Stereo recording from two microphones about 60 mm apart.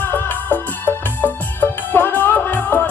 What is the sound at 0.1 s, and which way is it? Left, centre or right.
Music, left.